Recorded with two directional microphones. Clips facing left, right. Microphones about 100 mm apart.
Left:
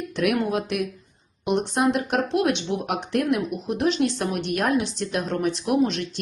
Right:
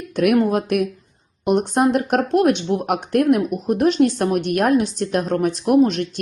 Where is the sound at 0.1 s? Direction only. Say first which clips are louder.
Right 7 dB; 50° right (ahead or behind).